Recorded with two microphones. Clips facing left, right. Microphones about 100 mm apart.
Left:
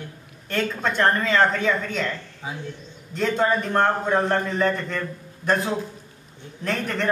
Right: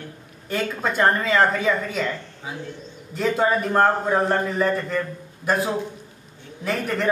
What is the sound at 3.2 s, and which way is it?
A man's voice, 5° right (ahead or behind).